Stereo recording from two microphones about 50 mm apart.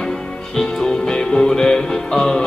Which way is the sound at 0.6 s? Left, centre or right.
Centre.